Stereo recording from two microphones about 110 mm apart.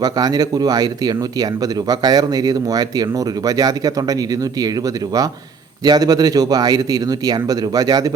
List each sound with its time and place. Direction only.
0.0 s speech: 35° right (ahead or behind)
5.8 s speech: 35° right (ahead or behind)